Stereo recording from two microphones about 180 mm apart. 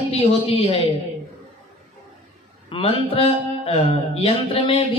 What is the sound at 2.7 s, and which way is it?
Speech, 30° left (ahead or behind).